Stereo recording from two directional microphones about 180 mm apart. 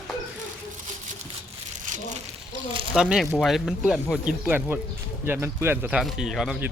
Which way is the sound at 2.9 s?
5° right (ahead or behind).